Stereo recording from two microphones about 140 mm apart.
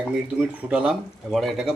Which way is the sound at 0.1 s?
10° right (ahead or behind).